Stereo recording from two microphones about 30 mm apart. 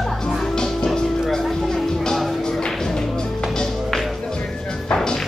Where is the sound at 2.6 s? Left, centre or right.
Centre.